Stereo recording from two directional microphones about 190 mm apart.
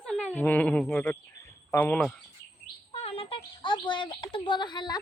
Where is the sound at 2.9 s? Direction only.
30° left (ahead or behind).